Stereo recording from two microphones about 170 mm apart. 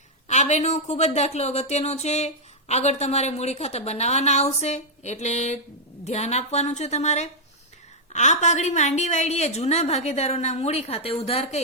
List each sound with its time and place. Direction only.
0.3 s speech: 45° left (ahead or behind)